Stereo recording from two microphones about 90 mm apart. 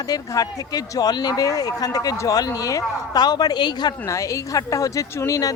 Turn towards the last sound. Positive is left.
turn(degrees=45)  # may be behind; listen again after turning